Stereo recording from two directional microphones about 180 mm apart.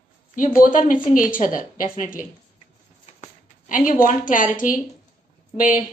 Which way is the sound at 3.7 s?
45° left (ahead or behind).